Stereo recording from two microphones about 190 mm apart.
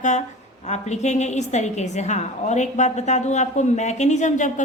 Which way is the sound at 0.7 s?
35° left (ahead or behind).